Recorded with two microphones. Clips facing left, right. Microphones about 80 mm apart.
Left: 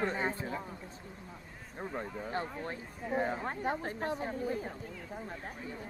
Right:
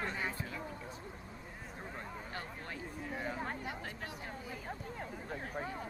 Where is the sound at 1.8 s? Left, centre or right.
Left.